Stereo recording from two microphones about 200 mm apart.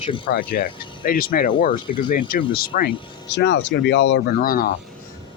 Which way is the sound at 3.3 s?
60° left (ahead or behind).